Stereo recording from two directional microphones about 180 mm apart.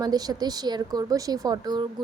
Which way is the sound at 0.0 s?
20° right (ahead or behind).